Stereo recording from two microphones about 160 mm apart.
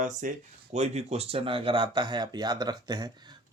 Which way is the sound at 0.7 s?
45° right (ahead or behind).